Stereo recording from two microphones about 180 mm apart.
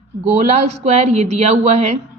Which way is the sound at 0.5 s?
40° right (ahead or behind).